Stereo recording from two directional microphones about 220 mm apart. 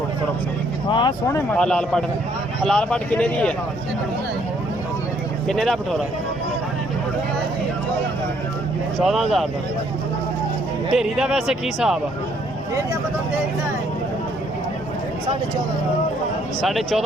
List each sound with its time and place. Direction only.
0.9 s speech: 20° left (ahead or behind)
1.5 s speech: 5° left (ahead or behind)
5.5 s speech: centre (ahead or behind)
9.0 s speech: centre (ahead or behind)
10.9 s speech: centre (ahead or behind)
16.6 s speech: centre (ahead or behind)